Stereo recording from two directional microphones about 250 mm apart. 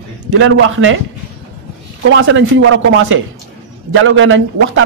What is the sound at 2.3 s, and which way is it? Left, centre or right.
A man's voice, right.